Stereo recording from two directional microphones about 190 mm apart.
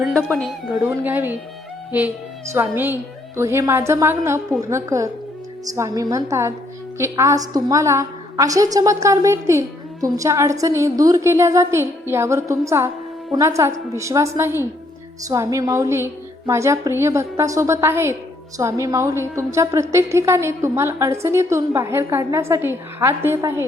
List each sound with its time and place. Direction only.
0.0 s speech: 5° left (ahead or behind)
0.7 s a woman's voice: 10° right (ahead or behind)